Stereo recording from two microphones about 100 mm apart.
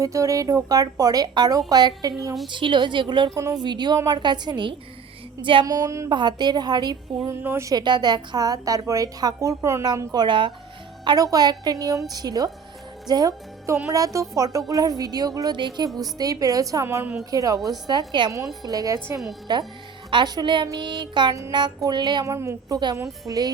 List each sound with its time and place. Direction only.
0.0 s a woman's voice: 30° right (ahead or behind)
2.5 s a woman's voice: 55° right (ahead or behind)
5.6 s a woman's voice: 35° right (ahead or behind)
6.1 s a woman's voice: 45° right (ahead or behind)
7.3 s a woman's voice: 25° right (ahead or behind)
7.7 s a woman's voice: 45° right (ahead or behind)
10.2 s speech: 55° right (ahead or behind)
11.0 s a woman's voice: 40° right (ahead or behind)
13.7 s a woman's voice: 30° right (ahead or behind)
16.8 s a woman's voice: 25° right (ahead or behind)
17.3 s a woman's voice: 35° right (ahead or behind)
17.8 s a woman's voice: 45° right (ahead or behind)
22.3 s a woman's voice: 30° right (ahead or behind)